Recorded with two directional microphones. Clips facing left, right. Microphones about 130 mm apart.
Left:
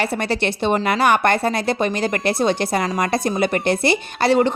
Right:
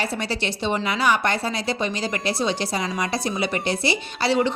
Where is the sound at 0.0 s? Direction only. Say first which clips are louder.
Left 5 dB; 60° left (ahead or behind).